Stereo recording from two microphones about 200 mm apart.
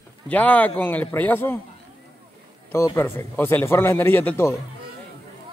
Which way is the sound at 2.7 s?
15° left (ahead or behind).